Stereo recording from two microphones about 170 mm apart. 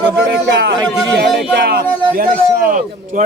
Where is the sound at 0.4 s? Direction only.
80° right.